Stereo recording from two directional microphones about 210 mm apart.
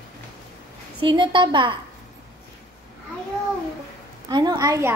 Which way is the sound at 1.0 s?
20° right (ahead or behind).